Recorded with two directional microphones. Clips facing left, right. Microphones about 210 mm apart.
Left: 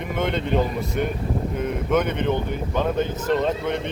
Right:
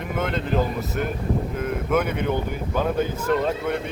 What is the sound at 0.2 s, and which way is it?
Speech, centre (ahead or behind).